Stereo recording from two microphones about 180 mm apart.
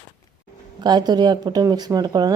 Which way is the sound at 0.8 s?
25° right (ahead or behind).